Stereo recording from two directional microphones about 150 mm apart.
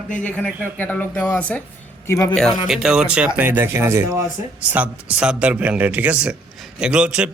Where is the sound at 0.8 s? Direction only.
10° left (ahead or behind).